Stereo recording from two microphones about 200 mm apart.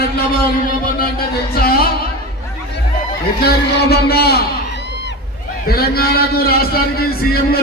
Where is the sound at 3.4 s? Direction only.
50° left (ahead or behind).